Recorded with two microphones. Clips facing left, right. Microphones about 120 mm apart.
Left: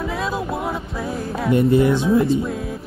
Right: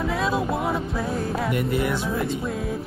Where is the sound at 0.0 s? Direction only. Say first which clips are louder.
Even; centre (ahead or behind).